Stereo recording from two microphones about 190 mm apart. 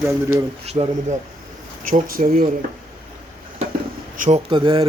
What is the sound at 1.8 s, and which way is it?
Speech, 45° right (ahead or behind).